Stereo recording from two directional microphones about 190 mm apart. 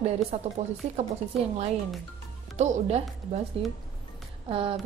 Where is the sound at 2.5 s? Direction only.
35° right (ahead or behind).